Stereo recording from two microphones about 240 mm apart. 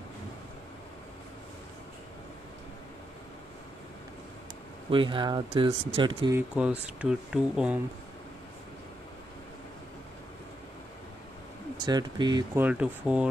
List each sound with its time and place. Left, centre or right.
4.9 s speech: centre
6.5 s speech: centre
11.8 s speech: centre
12.6 s speech: centre